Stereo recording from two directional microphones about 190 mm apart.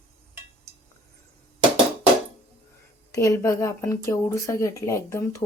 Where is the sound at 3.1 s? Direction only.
15° left (ahead or behind).